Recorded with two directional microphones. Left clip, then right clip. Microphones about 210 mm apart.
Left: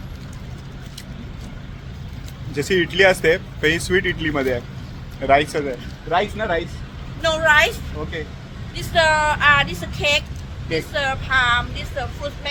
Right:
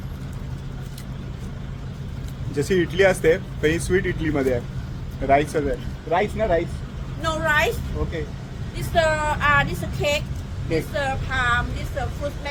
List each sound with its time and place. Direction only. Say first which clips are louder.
2.6 s speech: left 3 dB; 5° left (ahead or behind)
7.2 s a woman's voice: left 6 dB; 20° right (ahead or behind)
8.7 s speech: left 4 dB; 15° right (ahead or behind)